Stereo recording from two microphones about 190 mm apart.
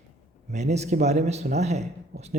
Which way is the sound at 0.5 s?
35° right (ahead or behind).